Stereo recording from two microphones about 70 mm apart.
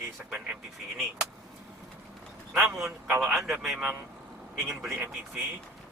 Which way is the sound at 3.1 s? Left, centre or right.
Right.